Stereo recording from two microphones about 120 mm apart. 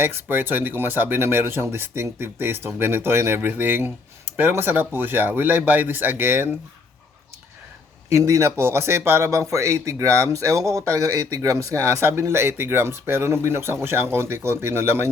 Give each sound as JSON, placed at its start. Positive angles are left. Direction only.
{"t": 0.0, "sound": "speech", "side_deg": -15}
{"t": 8.1, "sound": "speech", "side_deg": -25}